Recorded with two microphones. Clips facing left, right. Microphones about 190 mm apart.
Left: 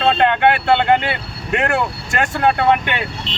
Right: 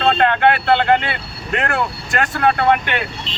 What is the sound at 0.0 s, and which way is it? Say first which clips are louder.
Speech: even; 20° left (ahead or behind).